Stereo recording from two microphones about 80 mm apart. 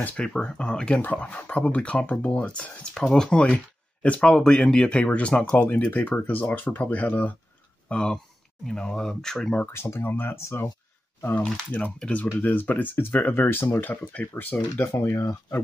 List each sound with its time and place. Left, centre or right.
0.0 s speech: centre
7.9 s speech: centre
9.7 s speech: left
11.4 s speech: centre; by 15.6 s left